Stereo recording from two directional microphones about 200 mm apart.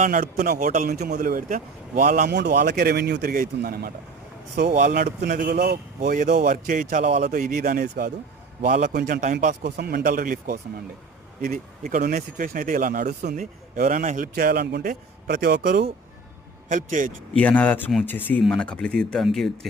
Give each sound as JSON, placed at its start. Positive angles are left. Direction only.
{"t": 0.0, "sound": "speech", "side_deg": -40}
{"t": 2.3, "sound": "speech", "side_deg": -55}
{"t": 6.5, "sound": "speech", "side_deg": -40}
{"t": 8.6, "sound": "speech", "side_deg": -40}
{"t": 8.9, "sound": "speech", "side_deg": -50}
{"t": 11.9, "sound": "speech", "side_deg": -40}
{"t": 16.6, "sound": "speech", "side_deg": -40}
{"t": 17.3, "sound": "speech", "side_deg": 10}